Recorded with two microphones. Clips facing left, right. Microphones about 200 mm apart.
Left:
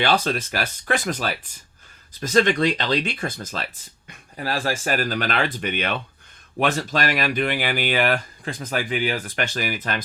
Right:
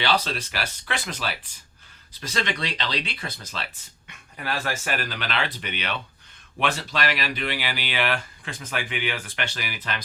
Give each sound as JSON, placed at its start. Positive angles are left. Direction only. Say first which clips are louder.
{"t": 0.0, "sound": "speech", "louder": "left 4 dB", "side_deg": 50}
{"t": 4.1, "sound": "speech", "louder": "left 4 dB", "side_deg": 35}